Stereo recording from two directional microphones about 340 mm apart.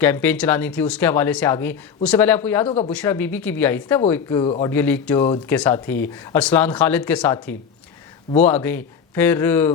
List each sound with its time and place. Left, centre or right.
0.0 s speech: centre
2.6 s speech: centre
2.9 s speech: centre
8.4 s speech: centre